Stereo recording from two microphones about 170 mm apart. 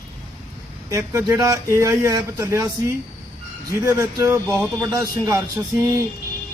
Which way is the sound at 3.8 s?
15° right (ahead or behind).